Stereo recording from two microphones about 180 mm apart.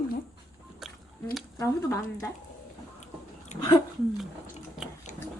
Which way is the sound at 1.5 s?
20° left (ahead or behind).